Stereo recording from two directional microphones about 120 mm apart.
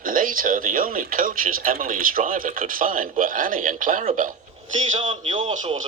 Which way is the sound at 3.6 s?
90° right.